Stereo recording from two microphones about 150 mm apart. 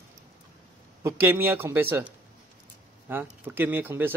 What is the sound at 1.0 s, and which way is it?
Speech, 15° right (ahead or behind).